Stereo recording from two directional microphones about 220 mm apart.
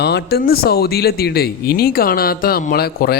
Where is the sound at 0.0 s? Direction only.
50° left (ahead or behind).